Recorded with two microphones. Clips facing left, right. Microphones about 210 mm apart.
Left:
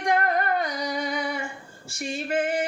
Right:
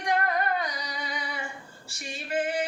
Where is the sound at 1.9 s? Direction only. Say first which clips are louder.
Left 7 dB; 45° left (ahead or behind).